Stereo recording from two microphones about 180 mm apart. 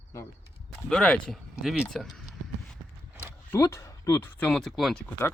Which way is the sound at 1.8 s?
Centre (ahead or behind).